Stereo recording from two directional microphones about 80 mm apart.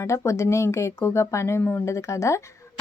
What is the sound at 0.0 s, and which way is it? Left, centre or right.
Speech, left.